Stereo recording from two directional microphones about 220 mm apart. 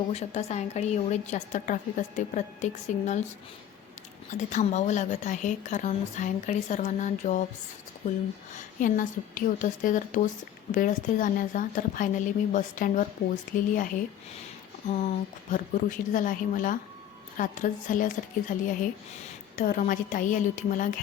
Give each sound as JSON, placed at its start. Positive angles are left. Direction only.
{"t": 0.1, "sound": "a woman's voice", "side_deg": 30}
{"t": 4.4, "sound": "a woman's voice", "side_deg": 35}